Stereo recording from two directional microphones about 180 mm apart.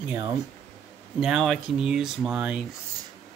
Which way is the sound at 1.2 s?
Centre (ahead or behind).